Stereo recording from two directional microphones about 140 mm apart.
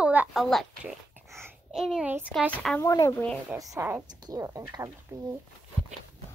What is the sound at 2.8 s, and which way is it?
Speech, 25° left (ahead or behind).